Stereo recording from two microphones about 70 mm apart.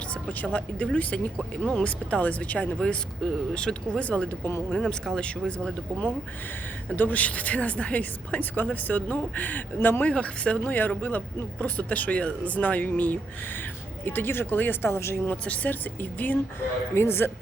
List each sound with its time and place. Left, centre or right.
0.1 s speech: left
6.9 s speech: left
15.3 s speech: left
16.9 s speech: left